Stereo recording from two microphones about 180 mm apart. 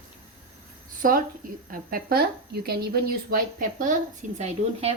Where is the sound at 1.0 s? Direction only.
50° right (ahead or behind).